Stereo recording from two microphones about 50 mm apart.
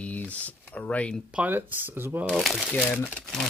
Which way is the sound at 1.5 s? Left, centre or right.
Right.